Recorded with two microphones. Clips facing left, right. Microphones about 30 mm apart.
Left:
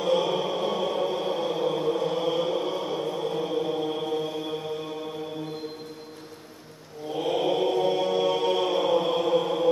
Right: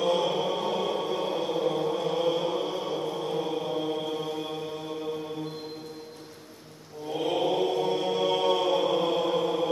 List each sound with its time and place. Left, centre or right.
0.0 s chant: centre
3.4 s mantra: centre
7.2 s mantra: centre
7.8 s chant: centre